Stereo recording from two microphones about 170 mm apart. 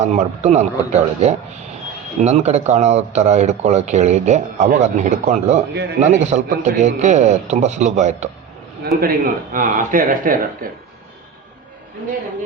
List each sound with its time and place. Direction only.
0.0 s a man's voice: 40° right (ahead or behind)
8.8 s a man's voice: 65° right (ahead or behind)